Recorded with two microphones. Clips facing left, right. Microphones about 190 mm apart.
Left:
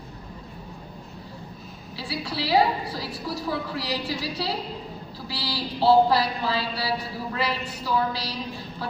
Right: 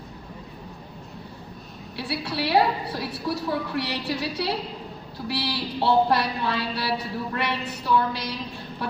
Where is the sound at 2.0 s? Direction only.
65° right (ahead or behind).